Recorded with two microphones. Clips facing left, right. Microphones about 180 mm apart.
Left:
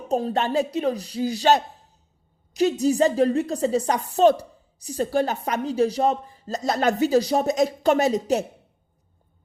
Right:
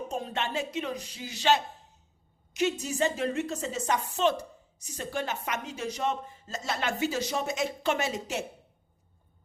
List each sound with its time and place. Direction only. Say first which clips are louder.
0.1 s speech: left 13 dB; 35° left (ahead or behind)